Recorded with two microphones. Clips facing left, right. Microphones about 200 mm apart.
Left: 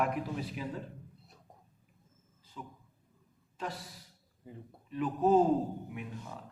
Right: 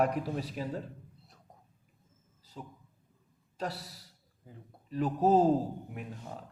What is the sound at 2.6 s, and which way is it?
A man's voice, 40° right (ahead or behind).